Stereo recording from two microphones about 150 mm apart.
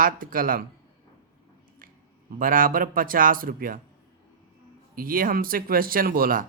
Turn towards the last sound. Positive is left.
turn(degrees=-75)  # may be behind; listen again after turning